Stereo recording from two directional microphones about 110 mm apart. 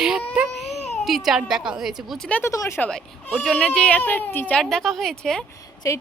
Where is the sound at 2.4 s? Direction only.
25° left (ahead or behind).